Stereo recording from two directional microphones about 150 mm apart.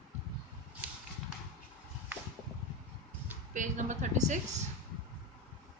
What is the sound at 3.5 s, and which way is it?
Speech, 55° right (ahead or behind).